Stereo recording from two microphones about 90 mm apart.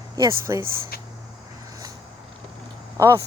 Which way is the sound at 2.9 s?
35° right (ahead or behind).